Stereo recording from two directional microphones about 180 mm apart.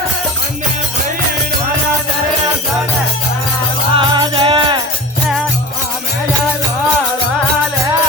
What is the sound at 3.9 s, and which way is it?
Music, 25° right (ahead or behind).